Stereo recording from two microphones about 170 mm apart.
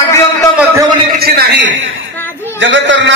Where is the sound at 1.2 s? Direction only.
65° right (ahead or behind); by 1.8 s 85° right.